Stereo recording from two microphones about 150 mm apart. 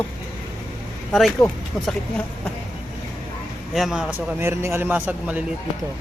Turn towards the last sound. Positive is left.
turn(degrees=-10)  # may be behind; listen again after turning